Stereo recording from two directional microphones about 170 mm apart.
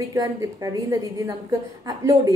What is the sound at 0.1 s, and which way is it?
A woman's voice, 20° right (ahead or behind).